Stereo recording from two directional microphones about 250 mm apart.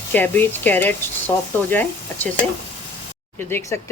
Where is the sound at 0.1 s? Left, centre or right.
Centre.